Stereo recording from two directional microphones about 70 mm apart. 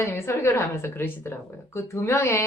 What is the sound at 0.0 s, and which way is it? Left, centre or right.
A woman's voice, left.